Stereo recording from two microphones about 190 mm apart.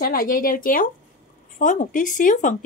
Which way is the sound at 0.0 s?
50° left (ahead or behind).